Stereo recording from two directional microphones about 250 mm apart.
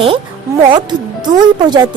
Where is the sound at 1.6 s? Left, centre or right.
Centre.